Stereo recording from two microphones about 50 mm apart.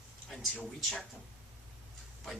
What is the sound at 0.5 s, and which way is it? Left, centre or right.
Speech, centre.